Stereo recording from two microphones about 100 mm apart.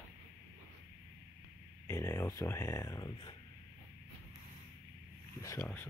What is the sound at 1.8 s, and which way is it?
Speech, 25° left (ahead or behind).